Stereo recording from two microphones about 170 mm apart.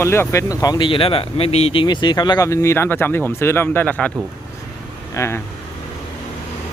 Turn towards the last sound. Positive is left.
turn(degrees=15)  # may be behind; listen again after turning